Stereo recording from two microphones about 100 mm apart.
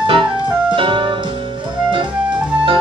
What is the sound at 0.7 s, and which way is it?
Music, 55° right (ahead or behind).